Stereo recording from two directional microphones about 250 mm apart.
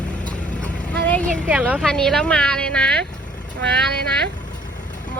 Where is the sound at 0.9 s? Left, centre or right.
Centre.